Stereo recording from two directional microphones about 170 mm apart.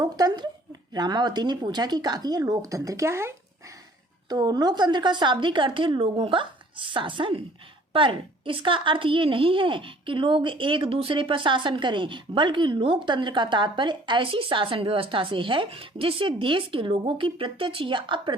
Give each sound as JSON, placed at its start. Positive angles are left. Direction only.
{"t": 0.0, "sound": "a woman's voice", "side_deg": -25}